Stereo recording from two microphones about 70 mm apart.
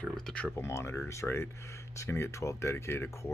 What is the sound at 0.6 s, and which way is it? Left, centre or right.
Speech, left.